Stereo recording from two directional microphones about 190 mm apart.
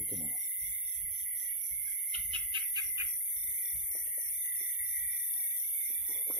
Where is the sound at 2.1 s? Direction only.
30° right (ahead or behind).